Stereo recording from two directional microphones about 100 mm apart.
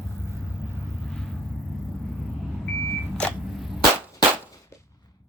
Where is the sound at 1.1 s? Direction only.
5° left (ahead or behind).